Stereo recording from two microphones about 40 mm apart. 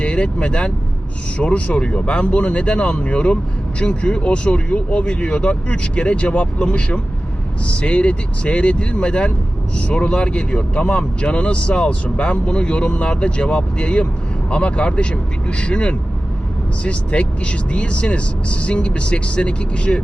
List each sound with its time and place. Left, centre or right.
0.0 s speech: left